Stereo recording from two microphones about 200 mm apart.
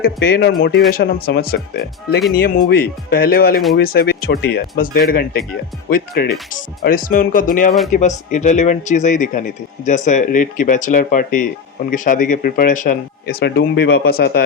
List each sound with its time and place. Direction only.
0.0 s speech: 50° left (ahead or behind)